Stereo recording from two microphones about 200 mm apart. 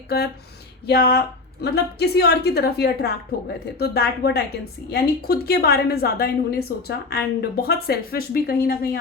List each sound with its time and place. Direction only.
0.9 s a woman's voice: 55° left (ahead or behind)